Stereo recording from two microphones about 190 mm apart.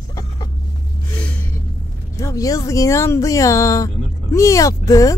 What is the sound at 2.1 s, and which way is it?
A woman's voice, 15° left (ahead or behind).